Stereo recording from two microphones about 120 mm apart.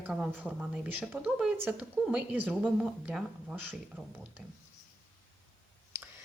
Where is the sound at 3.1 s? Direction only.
10° right (ahead or behind).